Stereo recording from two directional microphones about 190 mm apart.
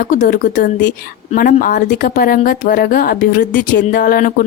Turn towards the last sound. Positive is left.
turn(degrees=45)  # may be behind; listen again after turning